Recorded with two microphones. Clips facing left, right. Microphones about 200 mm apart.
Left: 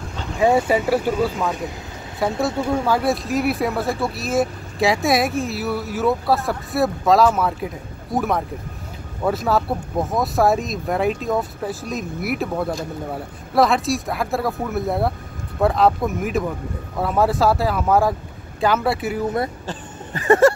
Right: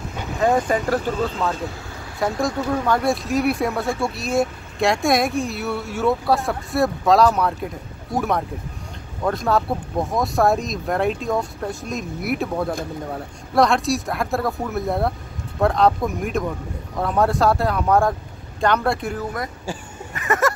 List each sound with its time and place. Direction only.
0.4 s speech: 10° left (ahead or behind)
2.1 s speech: 5° left (ahead or behind)
20.2 s speech: 30° left (ahead or behind)